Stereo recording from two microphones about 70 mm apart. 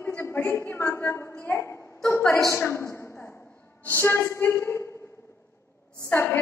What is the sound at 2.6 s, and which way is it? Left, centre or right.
A woman's voice, left.